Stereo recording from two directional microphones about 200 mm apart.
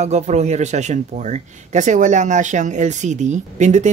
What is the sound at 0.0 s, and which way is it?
Speech, 35° right (ahead or behind).